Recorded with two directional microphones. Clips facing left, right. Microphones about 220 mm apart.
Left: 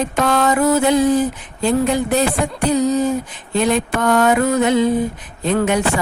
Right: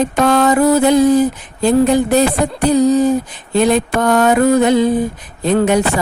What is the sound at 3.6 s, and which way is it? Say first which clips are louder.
Mantra: right 3 dB; 35° right (ahead or behind).